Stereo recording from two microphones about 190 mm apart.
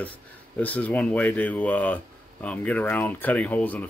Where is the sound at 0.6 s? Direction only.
10° left (ahead or behind).